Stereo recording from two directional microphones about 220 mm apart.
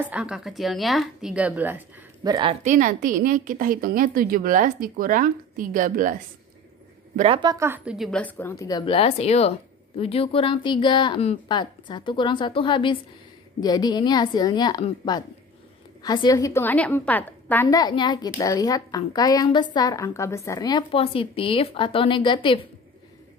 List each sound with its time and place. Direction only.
0.0 s a woman's voice: 5° right (ahead or behind); by 6.1 s 40° right (ahead or behind)
7.2 s a woman's voice: 25° right (ahead or behind); by 22.6 s 20° left (ahead or behind)